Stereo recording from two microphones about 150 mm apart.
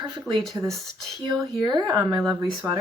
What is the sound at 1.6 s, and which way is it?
Speech, 25° right (ahead or behind).